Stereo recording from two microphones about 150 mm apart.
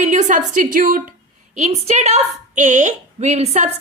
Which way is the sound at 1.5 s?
50° right (ahead or behind).